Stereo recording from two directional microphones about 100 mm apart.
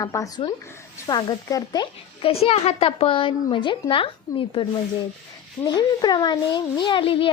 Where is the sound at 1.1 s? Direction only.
45° left (ahead or behind).